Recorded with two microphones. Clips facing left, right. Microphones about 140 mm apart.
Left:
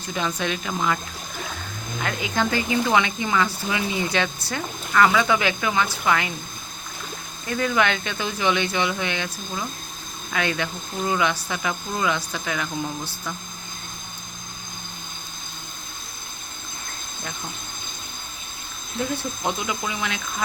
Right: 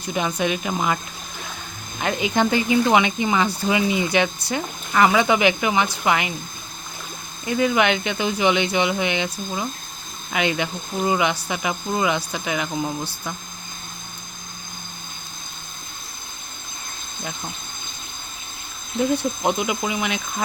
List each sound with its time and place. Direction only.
0.1 s speech: 15° right (ahead or behind)
2.0 s speech: 20° right (ahead or behind)
7.4 s speech: 15° right (ahead or behind)
19.4 s speech: 15° right (ahead or behind)